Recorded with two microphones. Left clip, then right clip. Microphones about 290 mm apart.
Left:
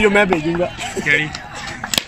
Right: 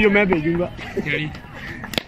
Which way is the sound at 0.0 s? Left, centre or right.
Left.